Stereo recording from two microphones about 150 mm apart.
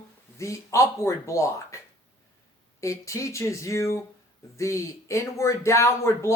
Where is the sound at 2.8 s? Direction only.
20° left (ahead or behind).